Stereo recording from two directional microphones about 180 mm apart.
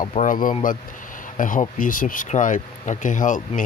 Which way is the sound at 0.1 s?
45° left (ahead or behind).